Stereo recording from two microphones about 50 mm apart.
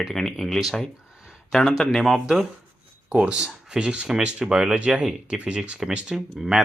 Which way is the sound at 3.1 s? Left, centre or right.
Right.